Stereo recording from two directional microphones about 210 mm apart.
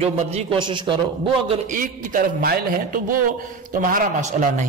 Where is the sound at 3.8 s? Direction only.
40° right (ahead or behind).